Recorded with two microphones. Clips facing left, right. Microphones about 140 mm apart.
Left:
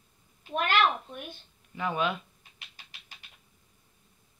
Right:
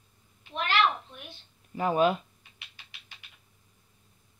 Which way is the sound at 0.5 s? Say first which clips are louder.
Left 1 dB; 50° left (ahead or behind).